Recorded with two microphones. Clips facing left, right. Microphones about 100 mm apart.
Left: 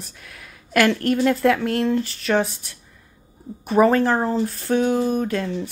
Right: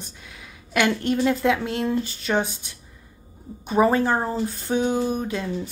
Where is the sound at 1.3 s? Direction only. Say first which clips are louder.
Left 3 dB; 5° right (ahead or behind).